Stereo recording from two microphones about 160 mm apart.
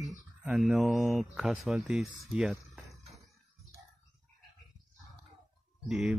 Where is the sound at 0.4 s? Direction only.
5° right (ahead or behind).